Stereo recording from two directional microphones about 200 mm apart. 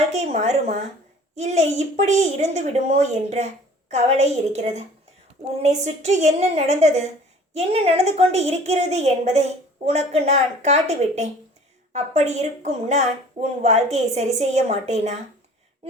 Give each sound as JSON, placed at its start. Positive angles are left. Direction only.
{"t": 0.1, "sound": "a woman's voice", "side_deg": -35}